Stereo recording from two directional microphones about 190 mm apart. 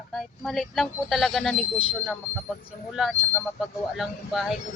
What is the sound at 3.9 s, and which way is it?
Speech, centre (ahead or behind).